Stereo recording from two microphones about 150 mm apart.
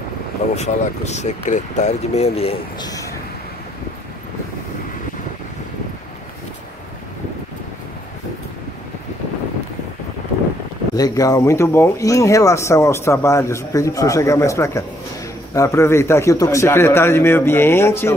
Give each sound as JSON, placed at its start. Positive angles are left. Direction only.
{"t": 0.6, "sound": "speech", "side_deg": 50}
{"t": 2.8, "sound": "a sound", "side_deg": 25}
{"t": 11.0, "sound": "a man's voice", "side_deg": 25}